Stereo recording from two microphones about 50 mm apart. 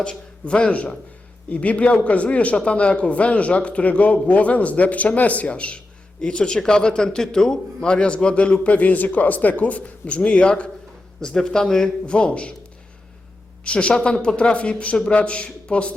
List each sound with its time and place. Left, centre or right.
0.0 s a man's voice: centre
12.0 s speech: left
13.7 s speech: centre